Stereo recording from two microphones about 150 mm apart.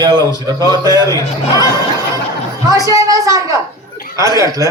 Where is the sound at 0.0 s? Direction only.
30° right (ahead or behind).